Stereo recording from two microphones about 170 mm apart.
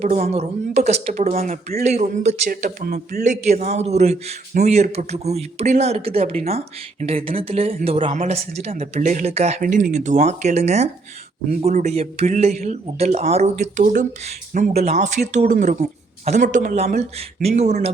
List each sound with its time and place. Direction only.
0.0 s a man's voice: 40° right (ahead or behind); by 3.2 s 65° right (ahead or behind)
3.2 s a man's voice: 40° right (ahead or behind)